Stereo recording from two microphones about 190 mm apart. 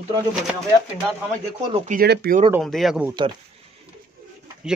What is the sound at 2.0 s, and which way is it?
Speech, 55° right (ahead or behind).